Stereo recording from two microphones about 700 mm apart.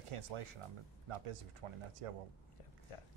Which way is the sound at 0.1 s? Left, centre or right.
Right.